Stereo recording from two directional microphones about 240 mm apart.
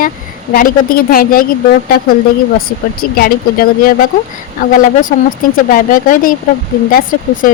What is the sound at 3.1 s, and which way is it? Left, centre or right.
Speech, left.